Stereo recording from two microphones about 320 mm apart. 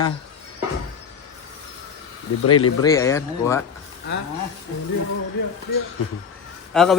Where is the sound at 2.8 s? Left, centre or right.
Centre.